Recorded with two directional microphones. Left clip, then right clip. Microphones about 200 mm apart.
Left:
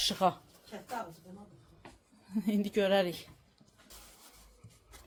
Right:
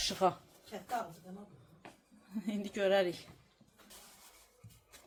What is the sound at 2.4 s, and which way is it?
Speech, 40° left (ahead or behind).